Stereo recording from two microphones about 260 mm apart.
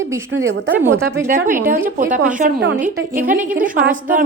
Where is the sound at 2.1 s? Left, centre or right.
Right.